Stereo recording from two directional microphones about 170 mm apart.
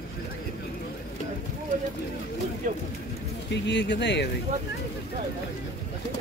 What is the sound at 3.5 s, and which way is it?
Speech, 90° left.